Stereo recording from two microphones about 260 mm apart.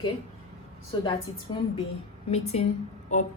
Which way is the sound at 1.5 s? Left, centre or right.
Centre.